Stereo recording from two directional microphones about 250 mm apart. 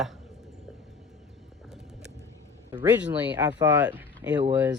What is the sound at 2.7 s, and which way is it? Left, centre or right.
A man's voice, centre.